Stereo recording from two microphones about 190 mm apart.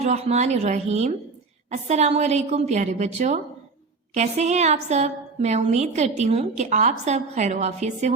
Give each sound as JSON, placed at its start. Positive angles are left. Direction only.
{"t": 0.0, "sound": "a woman's voice", "side_deg": -35}